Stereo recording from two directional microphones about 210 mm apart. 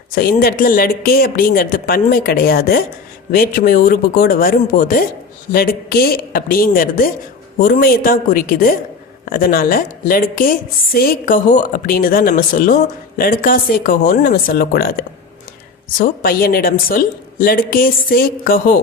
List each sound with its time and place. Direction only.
0.1 s a woman's voice: 45° left (ahead or behind)